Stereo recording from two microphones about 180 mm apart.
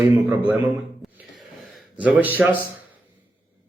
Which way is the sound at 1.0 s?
Centre (ahead or behind).